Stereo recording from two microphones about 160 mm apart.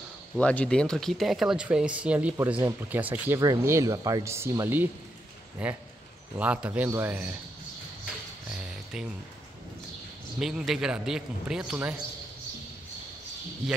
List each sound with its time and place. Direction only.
0.4 s a man's voice: 5° left (ahead or behind); by 7.3 s 10° right (ahead or behind)
8.5 s a sound: 5° right (ahead or behind)
10.4 s speech: centre (ahead or behind)